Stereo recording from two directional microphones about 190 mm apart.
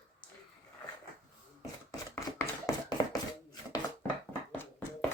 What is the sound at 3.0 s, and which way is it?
Chopping, 20° left (ahead or behind).